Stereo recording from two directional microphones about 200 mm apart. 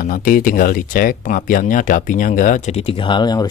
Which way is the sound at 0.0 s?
45° left (ahead or behind).